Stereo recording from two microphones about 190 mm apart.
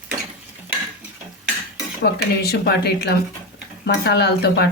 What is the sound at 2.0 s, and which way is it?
Speech, 55° left (ahead or behind).